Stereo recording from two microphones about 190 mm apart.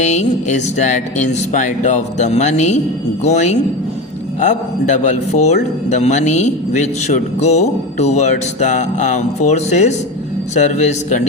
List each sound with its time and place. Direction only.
0.0 s speech: 35° left (ahead or behind)